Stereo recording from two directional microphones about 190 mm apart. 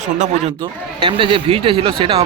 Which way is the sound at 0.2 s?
30° right (ahead or behind).